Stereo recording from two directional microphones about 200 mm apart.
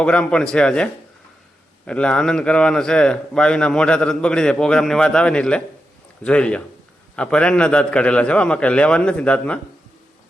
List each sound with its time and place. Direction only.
0.0 s a man's voice: 5° left (ahead or behind)